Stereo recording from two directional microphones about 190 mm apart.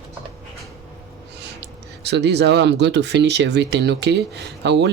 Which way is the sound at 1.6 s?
60° right (ahead or behind).